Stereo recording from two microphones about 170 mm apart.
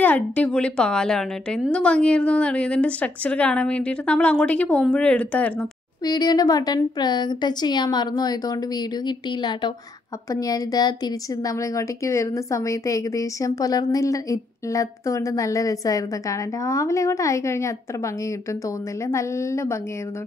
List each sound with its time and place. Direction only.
0.0 s a woman's voice: 10° left (ahead or behind)
6.0 s a woman's voice: 25° left (ahead or behind)